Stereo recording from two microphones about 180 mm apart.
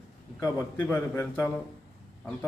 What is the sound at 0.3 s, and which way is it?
A man's voice, 15° left (ahead or behind).